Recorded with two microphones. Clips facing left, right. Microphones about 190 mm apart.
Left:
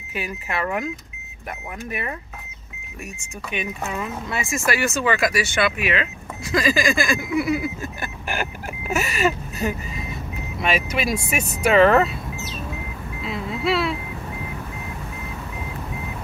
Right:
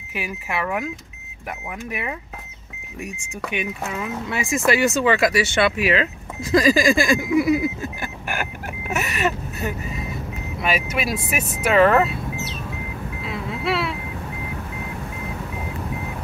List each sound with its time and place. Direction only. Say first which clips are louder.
0.1 s speech: even; 10° right (ahead or behind)
1.9 s speech: even; 15° right (ahead or behind)
3.5 s speech: even; 15° right (ahead or behind)
8.9 s speech: left 2 dB; centre (ahead or behind)